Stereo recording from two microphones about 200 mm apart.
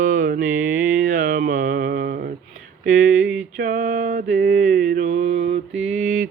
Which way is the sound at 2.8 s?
40° right (ahead or behind).